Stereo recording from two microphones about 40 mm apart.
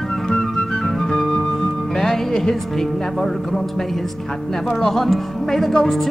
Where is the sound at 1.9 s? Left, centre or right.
Centre.